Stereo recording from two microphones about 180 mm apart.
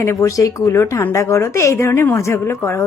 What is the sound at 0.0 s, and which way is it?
A woman's voice, 15° left (ahead or behind).